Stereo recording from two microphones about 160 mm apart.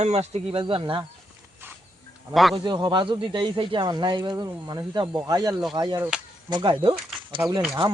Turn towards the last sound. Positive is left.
turn(degrees=-25)  # may be behind; listen again after turning